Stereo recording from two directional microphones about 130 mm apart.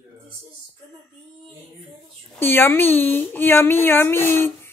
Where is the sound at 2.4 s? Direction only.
15° left (ahead or behind).